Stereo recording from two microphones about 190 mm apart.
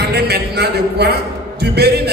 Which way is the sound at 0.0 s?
60° right (ahead or behind).